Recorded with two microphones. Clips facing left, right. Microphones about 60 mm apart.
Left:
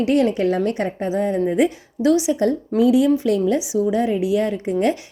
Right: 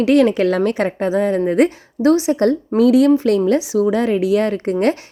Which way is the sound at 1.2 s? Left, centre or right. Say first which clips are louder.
Right 3 dB; right.